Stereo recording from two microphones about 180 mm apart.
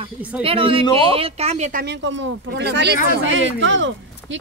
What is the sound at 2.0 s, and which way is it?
Speech, 80° right.